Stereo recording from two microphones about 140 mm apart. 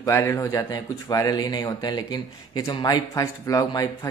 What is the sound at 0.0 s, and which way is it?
Speech, 20° left (ahead or behind).